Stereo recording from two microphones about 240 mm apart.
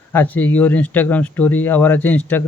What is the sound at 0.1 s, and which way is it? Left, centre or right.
A man's voice, centre.